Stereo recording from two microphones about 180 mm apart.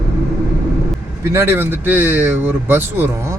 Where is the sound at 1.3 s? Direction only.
10° right (ahead or behind).